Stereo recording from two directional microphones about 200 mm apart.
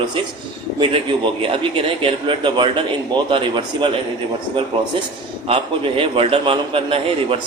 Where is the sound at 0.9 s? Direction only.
25° right (ahead or behind).